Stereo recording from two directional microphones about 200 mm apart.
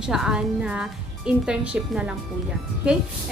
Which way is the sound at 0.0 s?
5° right (ahead or behind).